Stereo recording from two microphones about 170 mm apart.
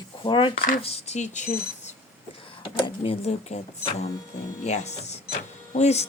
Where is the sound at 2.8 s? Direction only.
35° left (ahead or behind).